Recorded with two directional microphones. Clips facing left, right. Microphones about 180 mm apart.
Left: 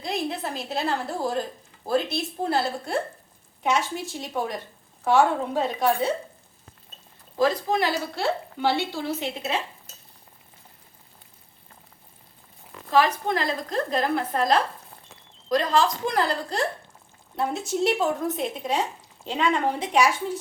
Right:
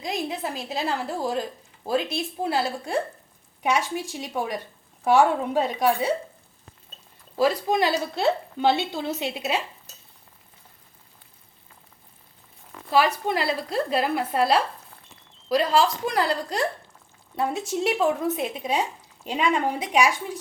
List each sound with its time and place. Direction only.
0.0 s speech: 10° right (ahead or behind)
7.3 s speech: 10° right (ahead or behind)
7.8 s a woman's voice: 20° right (ahead or behind)
12.9 s speech: 10° right (ahead or behind)